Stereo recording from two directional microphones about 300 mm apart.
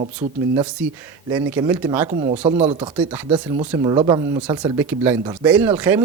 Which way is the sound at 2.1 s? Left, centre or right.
Right.